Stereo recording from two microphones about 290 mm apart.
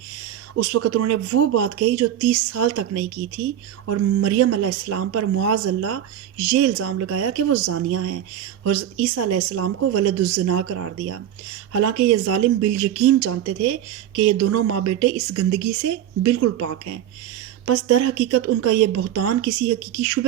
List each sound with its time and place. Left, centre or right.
0.5 s a woman's voice: right